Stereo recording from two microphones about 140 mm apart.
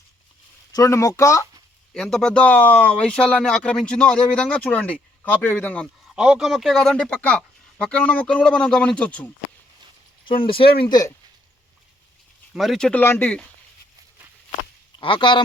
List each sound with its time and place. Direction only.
0.7 s speech: 20° left (ahead or behind)
1.9 s speech: 5° left (ahead or behind)
6.1 s speech: 5° right (ahead or behind); by 9.3 s 10° left (ahead or behind)
10.2 s speech: 40° left (ahead or behind)
12.5 s speech: centre (ahead or behind)
14.9 s speech: 35° left (ahead or behind)